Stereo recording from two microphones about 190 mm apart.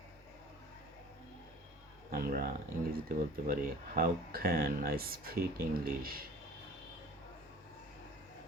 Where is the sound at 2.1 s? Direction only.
50° right (ahead or behind).